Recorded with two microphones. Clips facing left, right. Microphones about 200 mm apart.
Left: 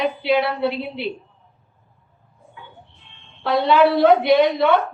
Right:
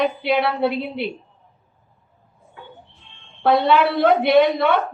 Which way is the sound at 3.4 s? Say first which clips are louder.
Even; 55° right (ahead or behind).